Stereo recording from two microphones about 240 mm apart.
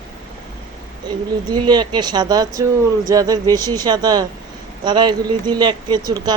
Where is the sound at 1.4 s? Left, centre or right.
Centre.